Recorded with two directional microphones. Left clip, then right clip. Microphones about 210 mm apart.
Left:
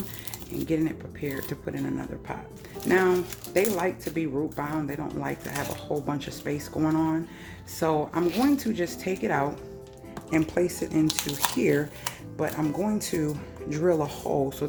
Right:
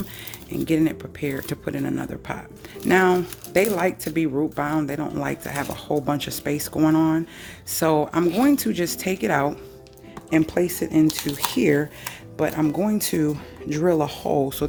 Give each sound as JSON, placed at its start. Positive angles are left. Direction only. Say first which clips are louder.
{"t": 0.7, "sound": "speech", "louder": "right 6 dB", "side_deg": -45}
{"t": 11.0, "sound": "speech", "louder": "right 4 dB", "side_deg": 0}
{"t": 11.5, "sound": "speech", "louder": "right 6 dB", "side_deg": -35}